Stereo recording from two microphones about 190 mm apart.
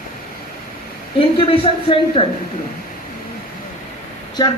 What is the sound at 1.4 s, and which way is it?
Speech, 30° left (ahead or behind).